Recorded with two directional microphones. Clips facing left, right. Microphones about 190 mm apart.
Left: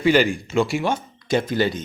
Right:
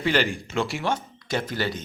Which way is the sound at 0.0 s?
10° left (ahead or behind).